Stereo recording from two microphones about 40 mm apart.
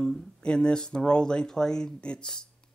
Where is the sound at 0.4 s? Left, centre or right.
Left.